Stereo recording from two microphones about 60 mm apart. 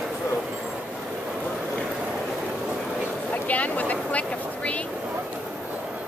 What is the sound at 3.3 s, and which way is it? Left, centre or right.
Speech, left.